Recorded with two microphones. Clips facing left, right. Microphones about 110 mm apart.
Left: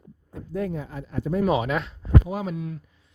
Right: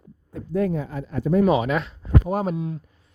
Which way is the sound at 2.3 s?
45° right (ahead or behind).